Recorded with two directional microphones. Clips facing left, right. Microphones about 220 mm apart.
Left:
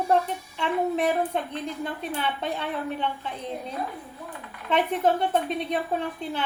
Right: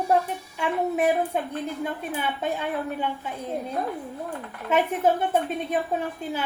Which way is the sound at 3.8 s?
50° right (ahead or behind).